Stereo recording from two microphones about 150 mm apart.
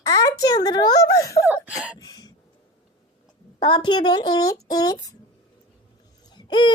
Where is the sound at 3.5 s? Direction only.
30° left (ahead or behind).